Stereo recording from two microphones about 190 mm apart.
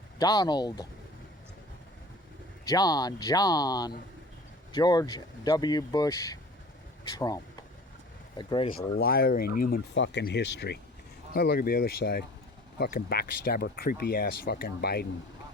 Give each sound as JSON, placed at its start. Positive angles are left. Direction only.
{"t": 0.2, "sound": "speech", "side_deg": 20}
{"t": 2.6, "sound": "speech", "side_deg": 20}
{"t": 8.7, "sound": "speech", "side_deg": 55}
{"t": 9.9, "sound": "speech", "side_deg": 70}